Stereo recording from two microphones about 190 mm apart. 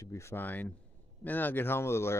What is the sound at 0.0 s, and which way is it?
Speech, 15° left (ahead or behind).